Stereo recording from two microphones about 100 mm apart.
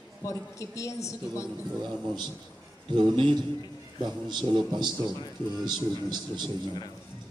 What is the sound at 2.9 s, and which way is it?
A man's voice, 55° right (ahead or behind).